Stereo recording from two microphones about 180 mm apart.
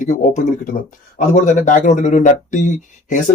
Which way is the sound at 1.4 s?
45° left (ahead or behind).